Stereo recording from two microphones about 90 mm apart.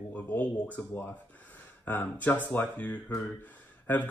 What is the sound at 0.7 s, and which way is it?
Speech, 20° left (ahead or behind).